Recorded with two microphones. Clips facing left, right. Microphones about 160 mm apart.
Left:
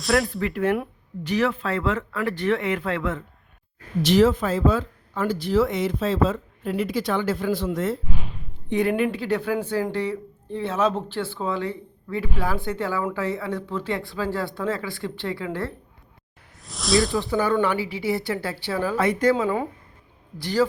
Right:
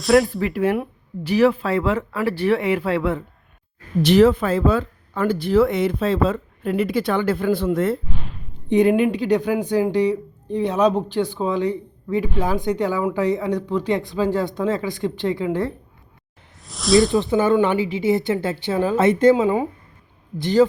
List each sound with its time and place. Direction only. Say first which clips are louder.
0.0 s speech: right 6 dB; centre (ahead or behind)
0.3 s speech: right 3 dB; 15° right (ahead or behind)
4.0 s speech: right 4 dB; 60° right (ahead or behind)
8.1 s a woman's voice: even; 5° left (ahead or behind)
8.7 s speech: right 6 dB; 20° right (ahead or behind)
16.6 s speech: right 6 dB; centre (ahead or behind)
17.1 s a woman's voice: right 5 dB; 20° right (ahead or behind)